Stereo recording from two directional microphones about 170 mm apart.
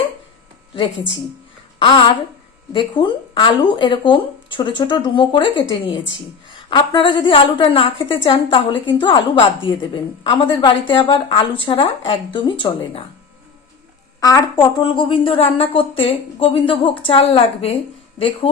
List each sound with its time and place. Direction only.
1.8 s speech: 30° left (ahead or behind)
6.7 s speech: 30° left (ahead or behind)
14.2 s a woman's voice: 20° left (ahead or behind); by 17.7 s 35° left (ahead or behind)